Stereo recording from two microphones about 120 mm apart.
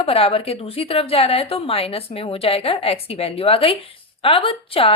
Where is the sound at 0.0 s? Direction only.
55° left (ahead or behind).